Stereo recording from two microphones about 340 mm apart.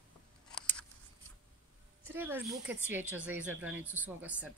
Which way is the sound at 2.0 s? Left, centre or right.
Centre.